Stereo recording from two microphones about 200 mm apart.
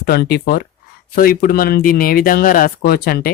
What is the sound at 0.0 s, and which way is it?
Speech, 50° left (ahead or behind).